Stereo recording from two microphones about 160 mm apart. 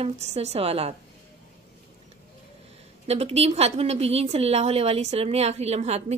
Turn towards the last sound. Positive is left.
turn(degrees=-45)  # may be behind; listen again after turning